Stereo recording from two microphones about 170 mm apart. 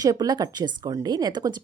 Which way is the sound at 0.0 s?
20° right (ahead or behind).